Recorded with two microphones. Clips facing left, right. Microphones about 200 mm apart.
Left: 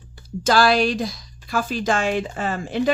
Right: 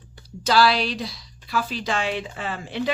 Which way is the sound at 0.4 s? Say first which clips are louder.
Left 3 dB; 50° left (ahead or behind).